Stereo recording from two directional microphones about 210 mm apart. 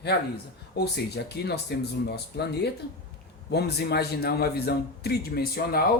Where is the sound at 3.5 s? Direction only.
50° left (ahead or behind).